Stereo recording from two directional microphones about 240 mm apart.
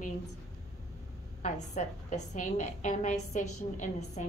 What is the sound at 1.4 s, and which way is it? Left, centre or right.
A woman's voice, left.